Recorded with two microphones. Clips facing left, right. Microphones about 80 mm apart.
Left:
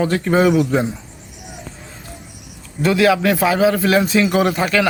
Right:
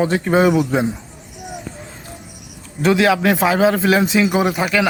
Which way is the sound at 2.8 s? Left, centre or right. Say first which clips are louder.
Even; right.